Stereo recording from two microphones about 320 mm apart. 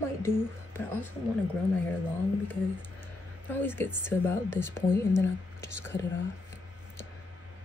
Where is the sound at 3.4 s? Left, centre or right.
Centre.